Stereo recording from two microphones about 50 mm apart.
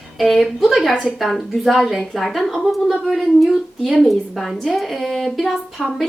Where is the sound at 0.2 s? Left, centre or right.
Centre.